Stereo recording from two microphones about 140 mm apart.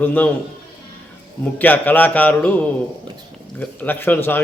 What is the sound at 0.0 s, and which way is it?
Speech, 15° left (ahead or behind).